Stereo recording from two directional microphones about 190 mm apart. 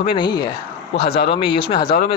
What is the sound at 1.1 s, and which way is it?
Speech, 60° left (ahead or behind).